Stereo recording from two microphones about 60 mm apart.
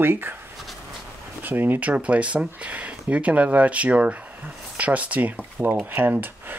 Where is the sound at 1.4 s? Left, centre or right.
Right.